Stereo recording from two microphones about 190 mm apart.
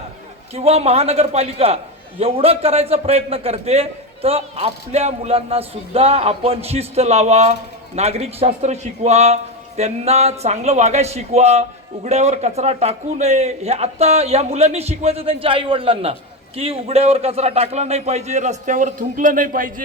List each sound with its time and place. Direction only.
0.5 s a man's voice: 30° right (ahead or behind)